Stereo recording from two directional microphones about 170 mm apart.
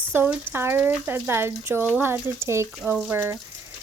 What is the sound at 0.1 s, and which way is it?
Speech, 10° right (ahead or behind).